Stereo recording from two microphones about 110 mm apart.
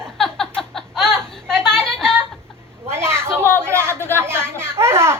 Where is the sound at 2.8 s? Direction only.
20° right (ahead or behind).